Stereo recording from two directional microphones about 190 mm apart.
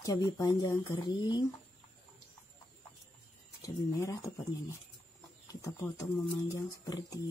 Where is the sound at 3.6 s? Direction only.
20° left (ahead or behind).